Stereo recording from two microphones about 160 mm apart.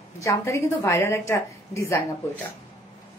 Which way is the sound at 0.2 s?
20° left (ahead or behind).